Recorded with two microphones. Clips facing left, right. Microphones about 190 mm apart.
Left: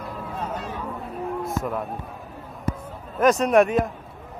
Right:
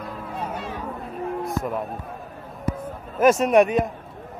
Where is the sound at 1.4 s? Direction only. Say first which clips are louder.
Right 1 dB; centre (ahead or behind).